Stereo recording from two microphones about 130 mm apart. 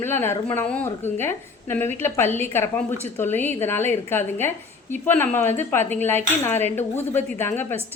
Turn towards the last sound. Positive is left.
turn(degrees=15)  # may be behind; listen again after turning